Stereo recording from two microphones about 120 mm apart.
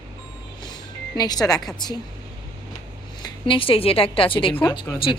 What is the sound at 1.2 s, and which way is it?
Speech, 30° left (ahead or behind).